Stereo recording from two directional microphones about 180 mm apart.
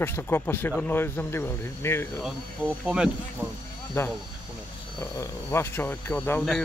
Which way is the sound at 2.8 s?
5° right (ahead or behind).